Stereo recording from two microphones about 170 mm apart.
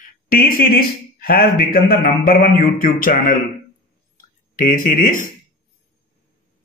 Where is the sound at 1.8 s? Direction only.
60° left (ahead or behind).